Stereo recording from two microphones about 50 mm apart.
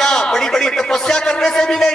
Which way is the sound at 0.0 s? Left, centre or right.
Centre.